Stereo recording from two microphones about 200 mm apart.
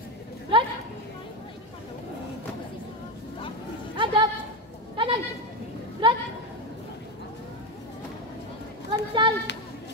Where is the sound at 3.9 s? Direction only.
25° right (ahead or behind).